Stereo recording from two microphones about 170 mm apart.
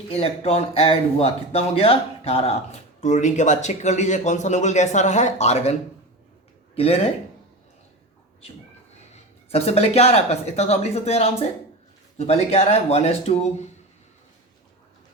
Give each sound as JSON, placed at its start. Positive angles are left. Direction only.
{"t": 0.1, "sound": "speech", "side_deg": 35}
{"t": 6.7, "sound": "speech", "side_deg": 35}
{"t": 9.5, "sound": "speech", "side_deg": 35}